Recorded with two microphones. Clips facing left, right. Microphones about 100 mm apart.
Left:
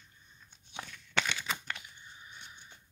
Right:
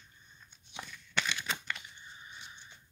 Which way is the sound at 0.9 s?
70° left (ahead or behind).